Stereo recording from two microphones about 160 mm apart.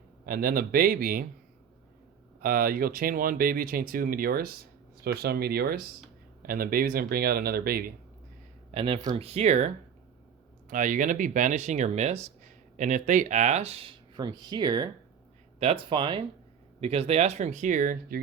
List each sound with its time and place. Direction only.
0.3 s speech: 70° right (ahead or behind)
2.4 s speech: 70° right (ahead or behind)
5.0 s speech: 85° right
8.7 s speech: 35° right (ahead or behind)
10.7 s speech: 55° right (ahead or behind); by 14.8 s 25° right (ahead or behind)
15.5 s speech: 35° right (ahead or behind)
16.8 s speech: 40° right (ahead or behind); by 18.2 s 55° right (ahead or behind)